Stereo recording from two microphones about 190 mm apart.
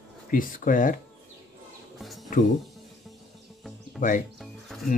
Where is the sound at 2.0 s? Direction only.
Centre (ahead or behind).